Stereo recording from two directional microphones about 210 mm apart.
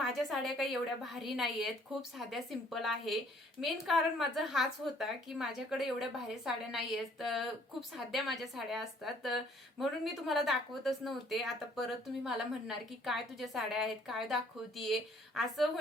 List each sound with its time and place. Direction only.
0.0 s a woman's voice: centre (ahead or behind)